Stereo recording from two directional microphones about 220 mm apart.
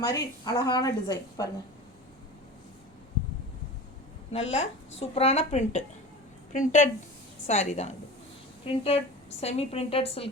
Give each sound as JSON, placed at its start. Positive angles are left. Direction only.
{"t": 0.0, "sound": "a woman's voice", "side_deg": 15}
{"t": 4.3, "sound": "a woman's voice", "side_deg": 30}